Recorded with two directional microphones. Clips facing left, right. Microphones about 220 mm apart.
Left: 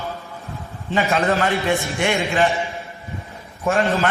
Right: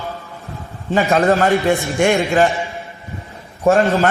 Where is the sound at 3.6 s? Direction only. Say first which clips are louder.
Right 6 dB; 40° right (ahead or behind).